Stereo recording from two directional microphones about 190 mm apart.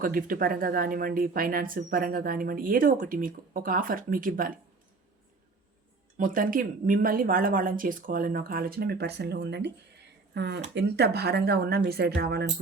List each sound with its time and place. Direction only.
0.0 s speech: 50° right (ahead or behind)
6.1 s speech: 45° right (ahead or behind)